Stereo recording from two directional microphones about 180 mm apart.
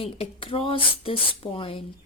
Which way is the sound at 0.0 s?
30° left (ahead or behind).